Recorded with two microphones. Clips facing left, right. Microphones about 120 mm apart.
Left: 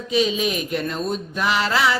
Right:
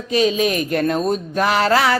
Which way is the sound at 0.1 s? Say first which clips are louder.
Right 4 dB; 45° right (ahead or behind).